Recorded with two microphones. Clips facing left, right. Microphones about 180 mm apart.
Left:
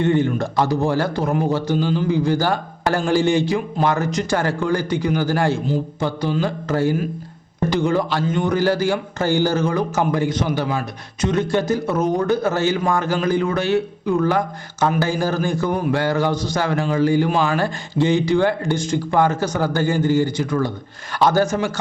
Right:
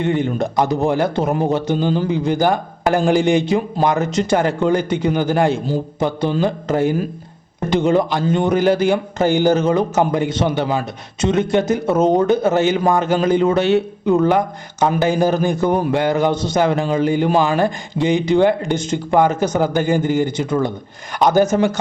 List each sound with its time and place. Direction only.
0.0 s a man's voice: 15° right (ahead or behind)